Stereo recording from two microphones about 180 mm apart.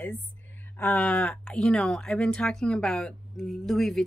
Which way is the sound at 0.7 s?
10° left (ahead or behind).